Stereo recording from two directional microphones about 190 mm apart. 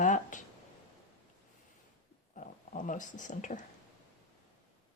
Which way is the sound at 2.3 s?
40° left (ahead or behind).